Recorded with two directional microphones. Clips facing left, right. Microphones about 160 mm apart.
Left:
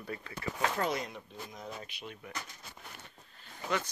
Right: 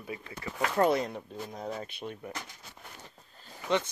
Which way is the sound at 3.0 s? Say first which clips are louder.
Right 3 dB; 35° right (ahead or behind).